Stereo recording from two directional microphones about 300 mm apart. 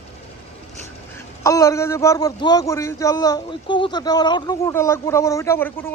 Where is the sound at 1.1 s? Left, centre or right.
Centre.